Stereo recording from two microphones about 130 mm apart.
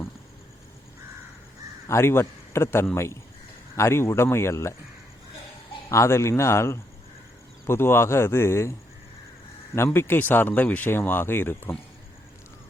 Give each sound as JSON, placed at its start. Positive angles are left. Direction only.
{"t": 1.9, "sound": "speech", "side_deg": 20}
{"t": 5.9, "sound": "speech", "side_deg": 20}
{"t": 9.7, "sound": "speech", "side_deg": 20}